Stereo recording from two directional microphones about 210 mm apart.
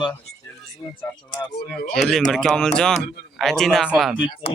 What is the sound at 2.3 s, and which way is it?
Speech, 5° left (ahead or behind).